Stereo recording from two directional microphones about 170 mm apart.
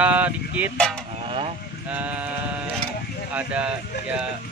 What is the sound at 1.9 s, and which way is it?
Speech, 10° right (ahead or behind).